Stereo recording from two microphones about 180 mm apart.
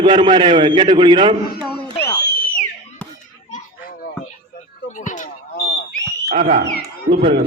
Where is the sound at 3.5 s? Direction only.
50° left (ahead or behind).